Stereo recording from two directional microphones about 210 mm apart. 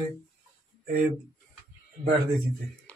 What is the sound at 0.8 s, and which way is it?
Speech, 40° right (ahead or behind).